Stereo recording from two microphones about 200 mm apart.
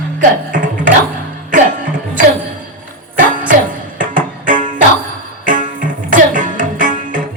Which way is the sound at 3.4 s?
40° right (ahead or behind).